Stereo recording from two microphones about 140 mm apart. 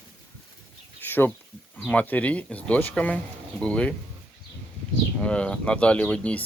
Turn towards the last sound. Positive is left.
turn(degrees=10)  # may be behind; listen again after turning